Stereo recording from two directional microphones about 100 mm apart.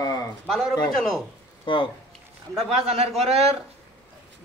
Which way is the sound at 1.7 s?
55° left (ahead or behind).